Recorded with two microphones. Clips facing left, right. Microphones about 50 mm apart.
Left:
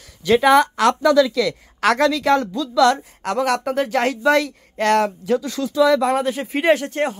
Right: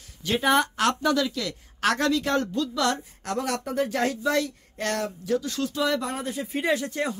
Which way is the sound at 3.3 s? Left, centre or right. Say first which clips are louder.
Left 8 dB; left.